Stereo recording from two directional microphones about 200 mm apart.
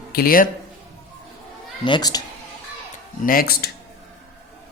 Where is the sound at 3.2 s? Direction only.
45° left (ahead or behind).